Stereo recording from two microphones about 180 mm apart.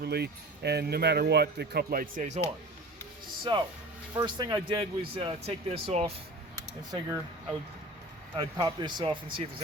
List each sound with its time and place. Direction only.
0.0 s speech: 65° right (ahead or behind); by 2.5 s 40° right (ahead or behind)
3.5 s speech: 25° right (ahead or behind)
6.6 s speech: 15° right (ahead or behind)
8.4 s speech: 25° right (ahead or behind)